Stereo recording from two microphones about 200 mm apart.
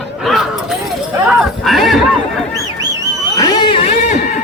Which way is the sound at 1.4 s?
Centre (ahead or behind).